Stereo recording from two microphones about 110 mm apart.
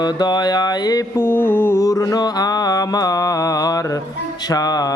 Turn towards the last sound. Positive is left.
turn(degrees=35)  # may be behind; listen again after turning